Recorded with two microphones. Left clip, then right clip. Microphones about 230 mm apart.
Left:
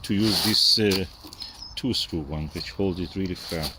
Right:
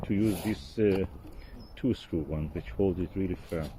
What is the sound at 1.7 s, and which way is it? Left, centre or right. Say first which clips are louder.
Speech: left 4 dB; centre.